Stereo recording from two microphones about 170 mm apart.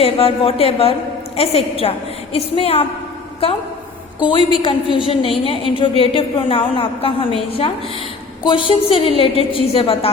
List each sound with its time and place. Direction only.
0.0 s a woman's voice: 35° left (ahead or behind)
4.6 s a woman's voice: 30° left (ahead or behind)